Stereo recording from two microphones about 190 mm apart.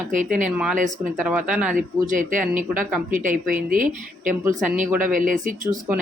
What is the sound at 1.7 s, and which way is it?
Speech, 45° right (ahead or behind).